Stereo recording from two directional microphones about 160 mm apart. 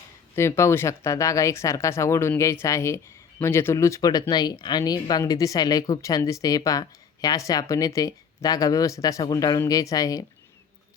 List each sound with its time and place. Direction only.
0.3 s speech: 15° left (ahead or behind)